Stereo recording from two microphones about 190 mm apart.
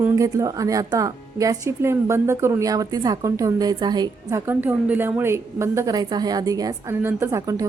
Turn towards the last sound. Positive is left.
turn(degrees=-15)  # may be behind; listen again after turning